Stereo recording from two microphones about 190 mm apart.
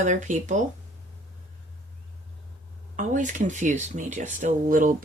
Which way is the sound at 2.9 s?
40° right (ahead or behind).